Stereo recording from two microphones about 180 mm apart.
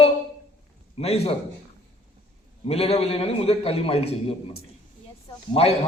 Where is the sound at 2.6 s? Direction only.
35° left (ahead or behind).